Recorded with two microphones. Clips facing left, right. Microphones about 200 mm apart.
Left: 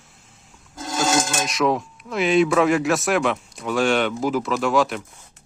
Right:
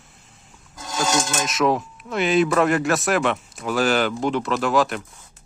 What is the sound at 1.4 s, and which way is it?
Speech, centre (ahead or behind).